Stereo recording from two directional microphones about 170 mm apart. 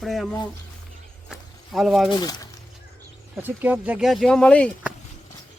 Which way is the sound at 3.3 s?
10° right (ahead or behind).